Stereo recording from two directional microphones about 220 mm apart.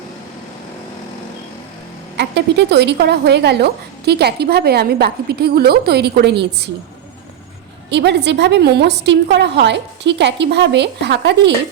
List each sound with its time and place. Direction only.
2.1 s a woman's voice: 50° right (ahead or behind)
7.9 s a woman's voice: 50° right (ahead or behind)